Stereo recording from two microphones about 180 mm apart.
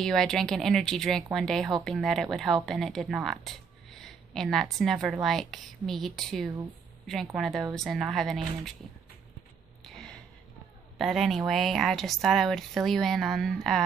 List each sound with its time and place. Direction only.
0.0 s speech: 5° left (ahead or behind)
9.8 s a sound: 5° left (ahead or behind)
11.0 s speech: centre (ahead or behind)